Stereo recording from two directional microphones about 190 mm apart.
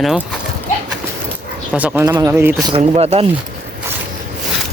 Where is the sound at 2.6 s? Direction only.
30° right (ahead or behind).